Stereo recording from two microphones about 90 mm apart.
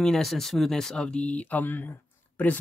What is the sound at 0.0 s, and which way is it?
Speech, 5° left (ahead or behind).